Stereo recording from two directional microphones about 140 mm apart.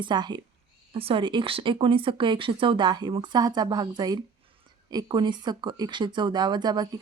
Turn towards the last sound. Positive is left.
turn(degrees=-30)  # may be behind; listen again after turning